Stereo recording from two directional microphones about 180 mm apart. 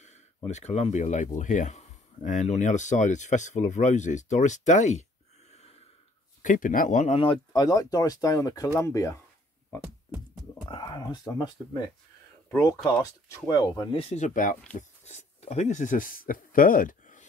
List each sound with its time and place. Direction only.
0.0 s speech: 40° left (ahead or behind)
5.5 s snort: 35° left (ahead or behind)
6.4 s speech: 45° left (ahead or behind)
7.2 s speech: 25° left (ahead or behind)
10.6 s whispering: 25° left (ahead or behind)
11.2 s speech: 20° left (ahead or behind)
14.0 s speech: 40° left (ahead or behind)